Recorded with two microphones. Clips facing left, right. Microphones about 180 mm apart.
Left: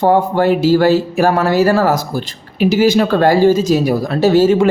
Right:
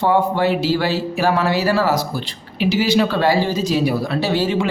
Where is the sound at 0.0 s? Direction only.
45° left (ahead or behind).